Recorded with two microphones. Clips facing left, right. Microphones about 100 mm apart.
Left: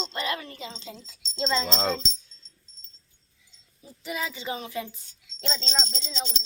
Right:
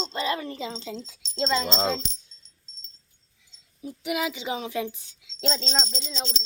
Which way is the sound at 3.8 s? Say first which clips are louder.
Right 12 dB; 80° right.